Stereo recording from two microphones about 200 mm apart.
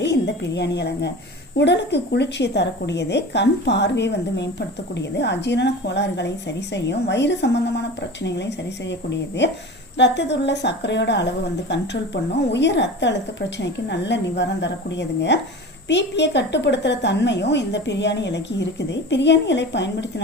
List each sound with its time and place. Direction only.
0.0 s a woman's voice: 60° left (ahead or behind)